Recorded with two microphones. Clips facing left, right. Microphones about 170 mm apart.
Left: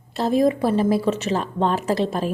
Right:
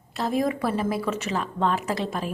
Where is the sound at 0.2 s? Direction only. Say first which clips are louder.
Left 6 dB; 25° left (ahead or behind).